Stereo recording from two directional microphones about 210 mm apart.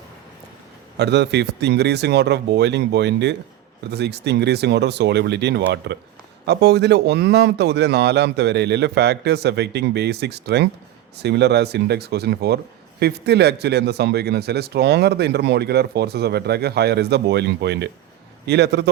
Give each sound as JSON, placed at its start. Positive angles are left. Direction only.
{"t": 0.9, "sound": "a man's voice", "side_deg": -55}